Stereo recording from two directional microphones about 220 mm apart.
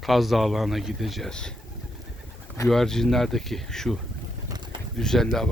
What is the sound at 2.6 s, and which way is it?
Speech, centre (ahead or behind).